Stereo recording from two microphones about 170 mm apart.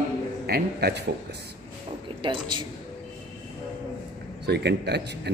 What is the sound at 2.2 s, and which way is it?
Speech, 30° right (ahead or behind).